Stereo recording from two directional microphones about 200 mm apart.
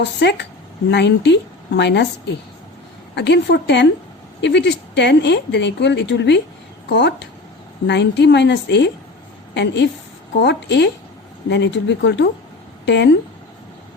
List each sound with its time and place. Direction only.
0.0 s speech: 60° left (ahead or behind)